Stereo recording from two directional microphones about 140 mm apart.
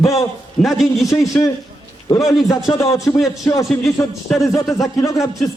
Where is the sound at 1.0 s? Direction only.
25° left (ahead or behind).